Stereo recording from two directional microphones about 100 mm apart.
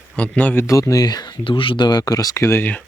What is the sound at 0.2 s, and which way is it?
Speech, 15° left (ahead or behind).